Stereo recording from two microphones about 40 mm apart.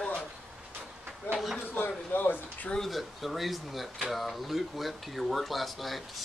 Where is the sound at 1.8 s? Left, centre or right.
Left.